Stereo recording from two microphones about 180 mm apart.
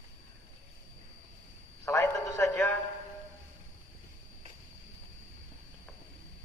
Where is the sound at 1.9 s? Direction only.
15° left (ahead or behind).